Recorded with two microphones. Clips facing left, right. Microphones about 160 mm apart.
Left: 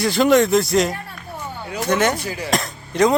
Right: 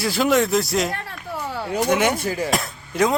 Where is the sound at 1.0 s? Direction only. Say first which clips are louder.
Right 2 dB; 90° right.